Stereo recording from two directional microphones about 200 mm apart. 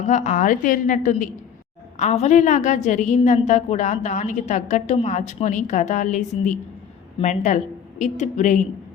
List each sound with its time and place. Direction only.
0.1 s a woman's voice: 40° left (ahead or behind)